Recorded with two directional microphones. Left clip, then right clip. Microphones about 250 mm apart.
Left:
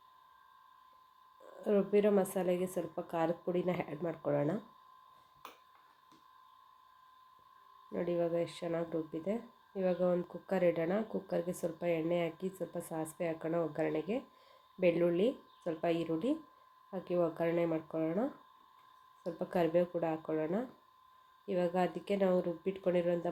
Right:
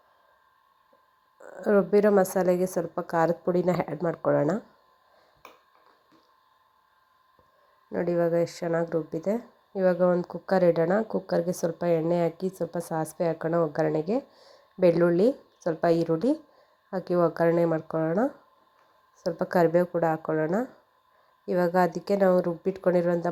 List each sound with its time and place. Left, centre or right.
1.6 s a woman's voice: right
8.1 s speech: centre
15.2 s speech: right
19.5 s a woman's voice: centre
21.8 s speech: right